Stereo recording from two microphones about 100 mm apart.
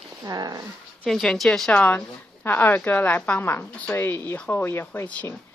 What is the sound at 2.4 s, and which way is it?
Speech, 20° left (ahead or behind).